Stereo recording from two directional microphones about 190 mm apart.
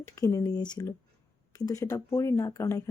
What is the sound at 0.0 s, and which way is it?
Speech, 15° left (ahead or behind).